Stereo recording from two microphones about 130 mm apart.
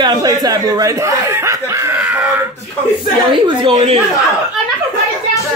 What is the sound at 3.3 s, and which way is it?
Speech, 40° right (ahead or behind).